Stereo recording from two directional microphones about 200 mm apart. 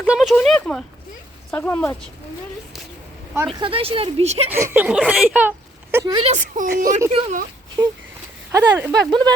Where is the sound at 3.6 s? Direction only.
30° right (ahead or behind).